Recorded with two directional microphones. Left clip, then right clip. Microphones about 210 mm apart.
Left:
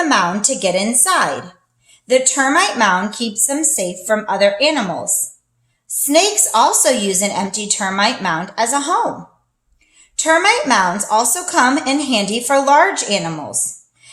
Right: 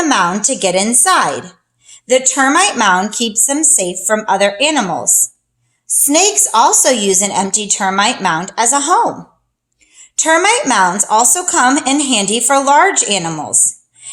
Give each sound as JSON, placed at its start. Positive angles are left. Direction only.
{"t": 0.0, "sound": "a woman's voice", "side_deg": -40}
{"t": 5.9, "sound": "a woman's voice", "side_deg": -35}